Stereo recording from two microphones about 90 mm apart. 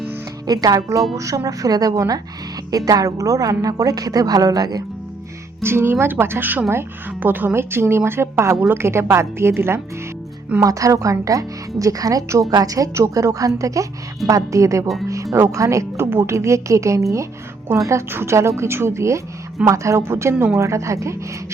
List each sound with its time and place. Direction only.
0.4 s a woman's voice: 45° right (ahead or behind)
5.6 s speech: 25° right (ahead or behind)
10.6 s speech: 40° right (ahead or behind)